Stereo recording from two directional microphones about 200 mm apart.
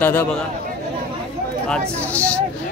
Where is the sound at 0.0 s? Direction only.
10° left (ahead or behind).